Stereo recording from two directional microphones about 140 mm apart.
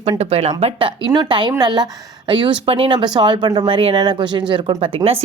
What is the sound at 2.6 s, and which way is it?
A woman's voice, 40° right (ahead or behind).